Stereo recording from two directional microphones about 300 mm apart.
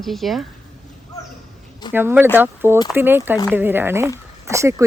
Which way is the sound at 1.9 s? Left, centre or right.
Centre.